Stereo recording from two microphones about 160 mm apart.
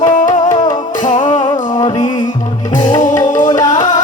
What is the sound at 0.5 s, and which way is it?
Music, 25° left (ahead or behind).